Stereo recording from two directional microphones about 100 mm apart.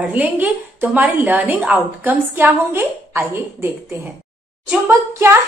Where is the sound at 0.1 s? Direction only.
15° right (ahead or behind).